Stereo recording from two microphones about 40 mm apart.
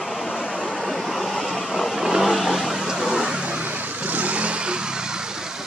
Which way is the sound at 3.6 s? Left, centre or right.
Right.